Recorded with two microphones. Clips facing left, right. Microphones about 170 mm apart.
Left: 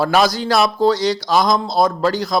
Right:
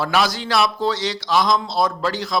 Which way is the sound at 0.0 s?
40° left (ahead or behind).